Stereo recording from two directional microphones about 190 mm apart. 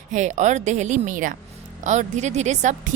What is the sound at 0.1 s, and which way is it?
A woman's voice, 40° right (ahead or behind).